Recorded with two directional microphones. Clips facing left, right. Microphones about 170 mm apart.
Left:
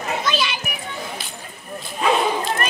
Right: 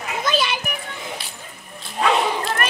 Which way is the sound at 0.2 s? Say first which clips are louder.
Right 4 dB; 45° right (ahead or behind).